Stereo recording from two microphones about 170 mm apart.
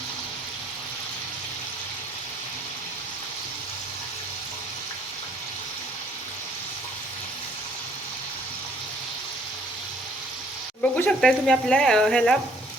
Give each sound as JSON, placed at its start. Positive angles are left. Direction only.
{"t": 10.9, "sound": "speech", "side_deg": 5}